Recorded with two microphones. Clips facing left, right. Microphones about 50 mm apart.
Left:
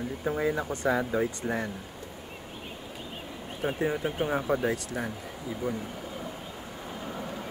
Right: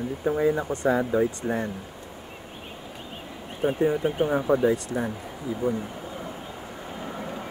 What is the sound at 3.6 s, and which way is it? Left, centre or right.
Speech, centre.